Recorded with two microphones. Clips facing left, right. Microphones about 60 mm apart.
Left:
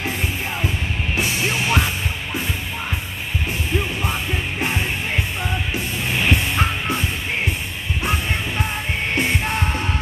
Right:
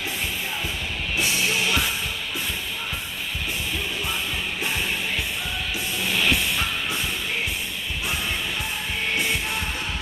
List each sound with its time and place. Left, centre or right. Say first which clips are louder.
1.4 s music: left 3 dB; left
6.0 s music: left 1 dB; left